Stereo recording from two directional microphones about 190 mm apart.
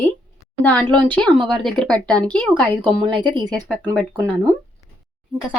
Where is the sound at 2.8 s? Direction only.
25° right (ahead or behind).